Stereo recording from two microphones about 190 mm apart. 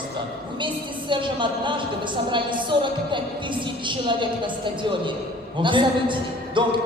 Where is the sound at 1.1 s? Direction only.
25° right (ahead or behind).